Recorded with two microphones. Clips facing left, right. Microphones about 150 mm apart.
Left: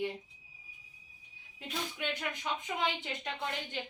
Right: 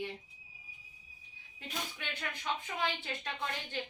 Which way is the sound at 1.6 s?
15° left (ahead or behind).